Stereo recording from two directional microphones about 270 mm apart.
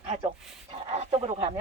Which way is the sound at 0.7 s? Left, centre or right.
Right.